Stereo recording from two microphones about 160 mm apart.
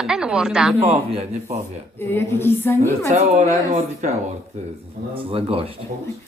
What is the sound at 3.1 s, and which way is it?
A man's voice, 45° right (ahead or behind).